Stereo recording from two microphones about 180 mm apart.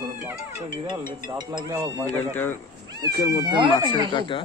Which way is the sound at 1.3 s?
20° right (ahead or behind).